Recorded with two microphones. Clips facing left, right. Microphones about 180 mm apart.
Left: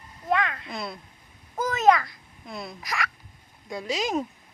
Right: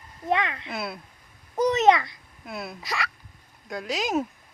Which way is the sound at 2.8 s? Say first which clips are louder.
Left 1 dB; 30° right (ahead or behind).